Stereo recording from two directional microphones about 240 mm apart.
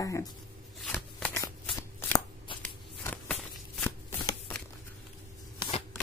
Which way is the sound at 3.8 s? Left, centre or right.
Centre.